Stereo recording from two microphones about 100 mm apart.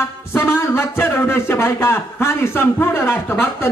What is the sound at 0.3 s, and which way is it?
A man's voice, 25° left (ahead or behind).